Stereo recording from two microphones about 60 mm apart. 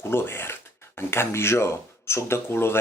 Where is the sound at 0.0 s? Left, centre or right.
Left.